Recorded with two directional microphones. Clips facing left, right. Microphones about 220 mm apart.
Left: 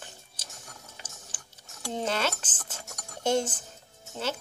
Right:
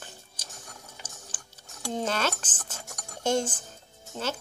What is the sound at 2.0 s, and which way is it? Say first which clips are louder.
Speech: even; 20° left (ahead or behind).